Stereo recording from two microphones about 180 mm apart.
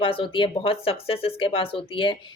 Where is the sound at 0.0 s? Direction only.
30° left (ahead or behind).